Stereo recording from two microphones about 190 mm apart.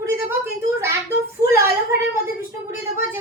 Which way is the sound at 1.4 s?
15° right (ahead or behind).